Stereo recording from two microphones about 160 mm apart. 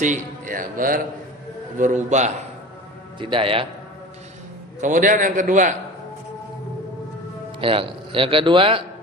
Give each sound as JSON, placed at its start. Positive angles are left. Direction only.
{"t": 0.0, "sound": "a man's voice", "side_deg": -55}
{"t": 1.8, "sound": "a man's voice", "side_deg": -50}
{"t": 3.2, "sound": "a man's voice", "side_deg": -30}
{"t": 4.8, "sound": "a man's voice", "side_deg": -55}
{"t": 7.6, "sound": "a man's voice", "side_deg": -35}